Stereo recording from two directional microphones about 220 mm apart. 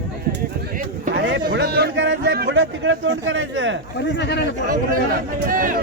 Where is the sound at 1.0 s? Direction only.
50° right (ahead or behind).